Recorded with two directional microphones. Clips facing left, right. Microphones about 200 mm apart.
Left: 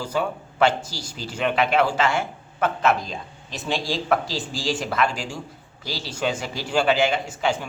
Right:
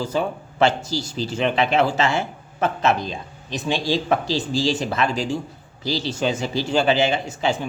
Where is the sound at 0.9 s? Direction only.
25° right (ahead or behind).